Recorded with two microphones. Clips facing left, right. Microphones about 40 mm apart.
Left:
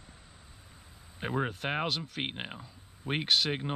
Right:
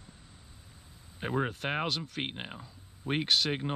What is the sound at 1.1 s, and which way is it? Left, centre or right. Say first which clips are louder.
Speech: right 1 dB; centre.